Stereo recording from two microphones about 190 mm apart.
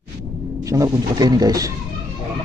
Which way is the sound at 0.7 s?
15° right (ahead or behind).